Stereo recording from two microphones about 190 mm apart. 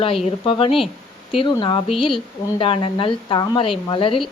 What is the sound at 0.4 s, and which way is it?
Speech, 30° left (ahead or behind).